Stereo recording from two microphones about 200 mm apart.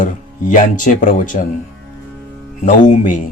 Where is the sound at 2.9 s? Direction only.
40° left (ahead or behind).